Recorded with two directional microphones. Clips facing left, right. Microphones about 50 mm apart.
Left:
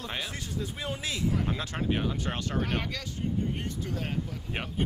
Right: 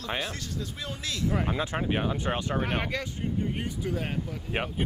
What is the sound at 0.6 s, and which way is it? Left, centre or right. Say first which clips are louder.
Speech: left 2 dB; centre.